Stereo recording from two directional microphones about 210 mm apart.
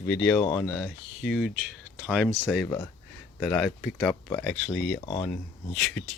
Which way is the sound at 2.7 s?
15° left (ahead or behind).